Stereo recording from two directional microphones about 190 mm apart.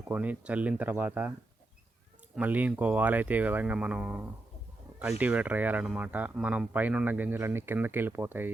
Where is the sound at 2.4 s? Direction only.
10° right (ahead or behind).